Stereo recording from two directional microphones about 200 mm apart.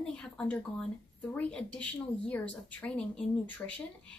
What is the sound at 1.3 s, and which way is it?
Speech, 5° left (ahead or behind).